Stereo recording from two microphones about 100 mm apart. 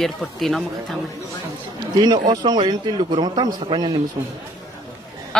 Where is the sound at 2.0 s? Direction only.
45° right (ahead or behind).